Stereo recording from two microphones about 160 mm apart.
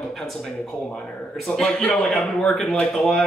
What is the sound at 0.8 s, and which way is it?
A man's voice, 5° left (ahead or behind).